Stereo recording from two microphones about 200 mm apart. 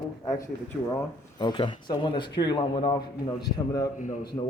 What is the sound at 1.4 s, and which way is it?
Speech, 20° left (ahead or behind).